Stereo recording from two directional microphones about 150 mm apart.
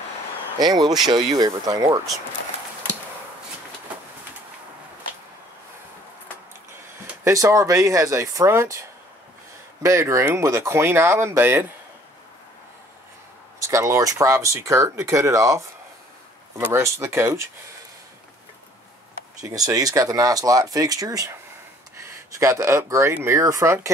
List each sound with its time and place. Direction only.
0.6 s speech: 25° right (ahead or behind)
7.2 s speech: 20° right (ahead or behind)
9.8 s speech: 20° right (ahead or behind)
13.6 s speech: 20° right (ahead or behind)
16.7 s speech: 15° right (ahead or behind)
19.4 s speech: 25° right (ahead or behind)
22.4 s speech: 20° right (ahead or behind)